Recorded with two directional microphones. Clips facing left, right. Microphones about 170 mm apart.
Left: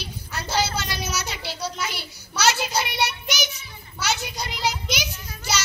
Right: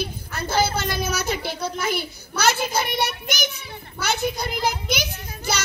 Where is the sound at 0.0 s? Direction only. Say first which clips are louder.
Right 5 dB; 55° right (ahead or behind).